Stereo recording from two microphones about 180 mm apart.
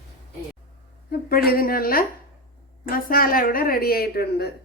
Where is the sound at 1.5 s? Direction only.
55° left (ahead or behind).